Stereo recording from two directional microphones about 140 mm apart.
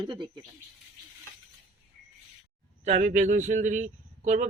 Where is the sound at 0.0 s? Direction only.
35° right (ahead or behind).